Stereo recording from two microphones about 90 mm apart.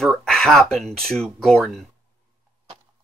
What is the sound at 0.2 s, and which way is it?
Speech, 5° left (ahead or behind).